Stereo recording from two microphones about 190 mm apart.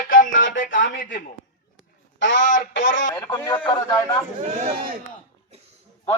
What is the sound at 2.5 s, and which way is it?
Speech, 85° left.